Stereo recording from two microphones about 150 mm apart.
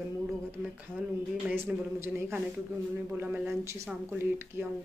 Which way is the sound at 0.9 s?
5° left (ahead or behind).